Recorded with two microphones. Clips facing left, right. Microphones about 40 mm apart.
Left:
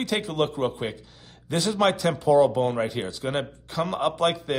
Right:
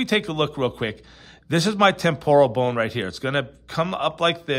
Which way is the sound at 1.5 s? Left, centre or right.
Right.